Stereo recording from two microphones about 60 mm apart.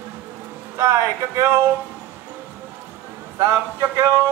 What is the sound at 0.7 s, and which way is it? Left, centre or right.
Speech, right.